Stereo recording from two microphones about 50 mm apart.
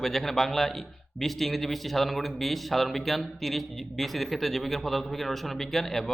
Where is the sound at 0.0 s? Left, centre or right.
Centre.